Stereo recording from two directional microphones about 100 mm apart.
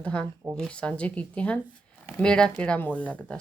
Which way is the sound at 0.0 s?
10° left (ahead or behind).